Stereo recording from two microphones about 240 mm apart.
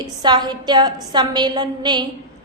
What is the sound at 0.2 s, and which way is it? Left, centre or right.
A woman's voice, centre.